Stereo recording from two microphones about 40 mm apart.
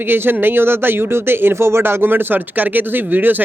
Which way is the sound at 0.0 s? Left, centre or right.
Right.